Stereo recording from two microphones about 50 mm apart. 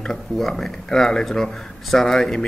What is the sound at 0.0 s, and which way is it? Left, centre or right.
Speech, centre.